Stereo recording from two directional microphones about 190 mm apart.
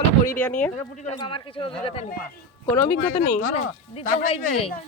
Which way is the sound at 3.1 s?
45° left (ahead or behind).